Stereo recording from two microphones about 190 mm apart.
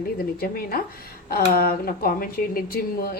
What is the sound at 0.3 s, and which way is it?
A woman's voice, 50° left (ahead or behind).